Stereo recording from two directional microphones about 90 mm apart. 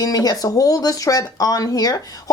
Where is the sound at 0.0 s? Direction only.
45° left (ahead or behind).